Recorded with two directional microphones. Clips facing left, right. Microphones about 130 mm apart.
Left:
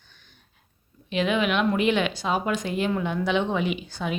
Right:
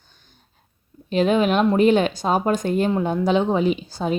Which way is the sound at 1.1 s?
40° right (ahead or behind).